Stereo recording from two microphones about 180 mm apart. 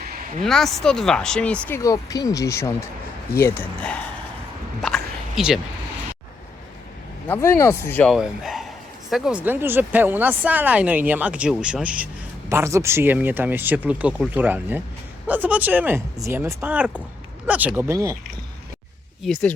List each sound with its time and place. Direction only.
0.4 s speech: centre (ahead or behind)
1.8 s speech: 20° left (ahead or behind)
4.8 s a sound: centre (ahead or behind)
7.3 s speech: 15° left (ahead or behind); by 18.2 s 15° right (ahead or behind)
19.2 s speech: 5° left (ahead or behind)